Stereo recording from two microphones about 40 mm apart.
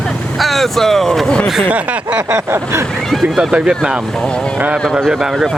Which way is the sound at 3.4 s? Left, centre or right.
Centre.